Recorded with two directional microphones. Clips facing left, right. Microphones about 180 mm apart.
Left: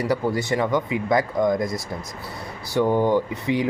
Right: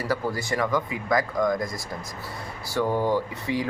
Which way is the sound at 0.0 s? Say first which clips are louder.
Left 5 dB; 20° left (ahead or behind).